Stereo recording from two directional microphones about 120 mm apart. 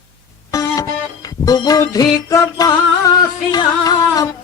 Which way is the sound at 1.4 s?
30° left (ahead or behind).